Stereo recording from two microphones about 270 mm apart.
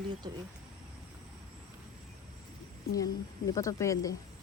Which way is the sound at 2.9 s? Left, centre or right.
Centre.